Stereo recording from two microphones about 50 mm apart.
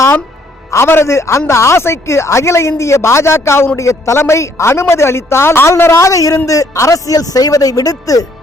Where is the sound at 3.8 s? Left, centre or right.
Left.